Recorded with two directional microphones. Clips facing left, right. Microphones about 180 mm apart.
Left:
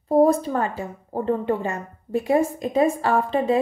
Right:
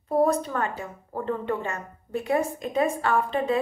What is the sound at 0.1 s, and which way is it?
A woman's voice, 35° left (ahead or behind).